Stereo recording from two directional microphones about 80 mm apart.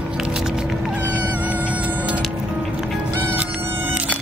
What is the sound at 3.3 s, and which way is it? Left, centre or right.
Music, right.